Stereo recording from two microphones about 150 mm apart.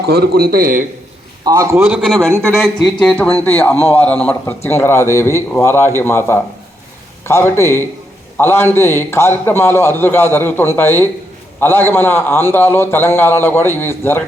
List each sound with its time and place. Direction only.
0.0 s a man's voice: 90° right; by 0.9 s 70° right (ahead or behind)
1.5 s a man's voice: 20° right (ahead or behind)
2.0 s a man's voice: centre (ahead or behind); by 14.2 s 15° left (ahead or behind)